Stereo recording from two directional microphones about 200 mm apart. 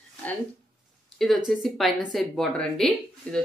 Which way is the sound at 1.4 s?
Centre (ahead or behind).